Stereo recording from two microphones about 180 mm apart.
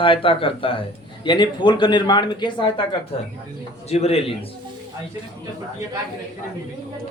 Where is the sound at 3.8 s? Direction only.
35° left (ahead or behind).